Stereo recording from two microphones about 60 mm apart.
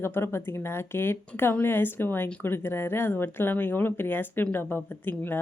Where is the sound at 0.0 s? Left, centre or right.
Left.